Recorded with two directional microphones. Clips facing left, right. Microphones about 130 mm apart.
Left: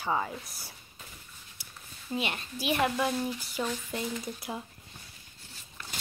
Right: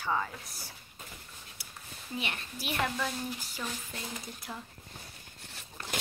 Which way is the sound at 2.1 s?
30° left (ahead or behind).